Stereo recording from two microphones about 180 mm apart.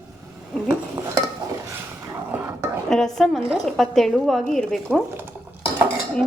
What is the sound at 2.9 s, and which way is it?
A woman's voice, centre (ahead or behind).